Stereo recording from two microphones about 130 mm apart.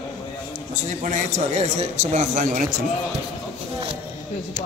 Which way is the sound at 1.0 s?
70° right (ahead or behind).